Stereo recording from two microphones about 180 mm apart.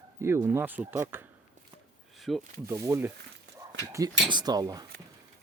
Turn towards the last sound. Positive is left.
turn(degrees=-20)  # may be behind; listen again after turning